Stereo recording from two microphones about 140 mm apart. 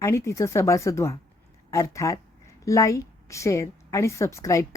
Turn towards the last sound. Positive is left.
turn(degrees=20)  # may be behind; listen again after turning